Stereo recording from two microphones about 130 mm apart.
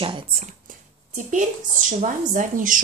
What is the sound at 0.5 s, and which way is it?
Speech, 80° right.